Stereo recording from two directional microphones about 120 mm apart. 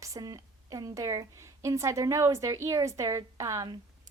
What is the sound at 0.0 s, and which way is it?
A woman's voice, 30° right (ahead or behind).